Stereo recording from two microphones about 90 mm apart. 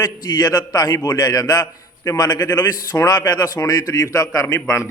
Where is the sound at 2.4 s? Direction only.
25° left (ahead or behind).